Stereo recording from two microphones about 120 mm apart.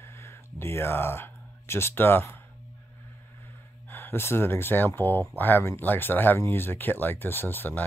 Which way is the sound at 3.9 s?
20° left (ahead or behind).